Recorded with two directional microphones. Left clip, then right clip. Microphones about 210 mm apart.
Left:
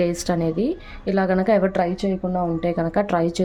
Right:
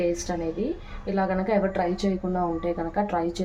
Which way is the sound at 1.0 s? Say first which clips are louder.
Left 6 dB; 55° left (ahead or behind).